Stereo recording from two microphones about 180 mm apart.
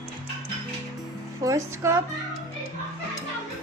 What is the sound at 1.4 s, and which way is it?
Speech, 15° right (ahead or behind).